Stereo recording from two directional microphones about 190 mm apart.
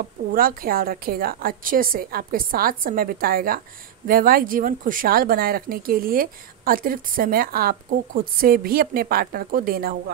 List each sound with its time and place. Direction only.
0.3 s speech: 50° right (ahead or behind)